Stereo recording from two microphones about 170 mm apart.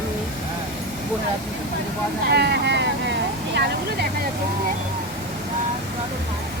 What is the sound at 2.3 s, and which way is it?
Vehicle, 75° right (ahead or behind).